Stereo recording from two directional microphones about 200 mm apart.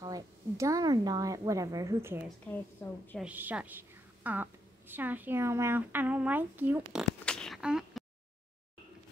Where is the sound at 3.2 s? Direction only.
10° right (ahead or behind).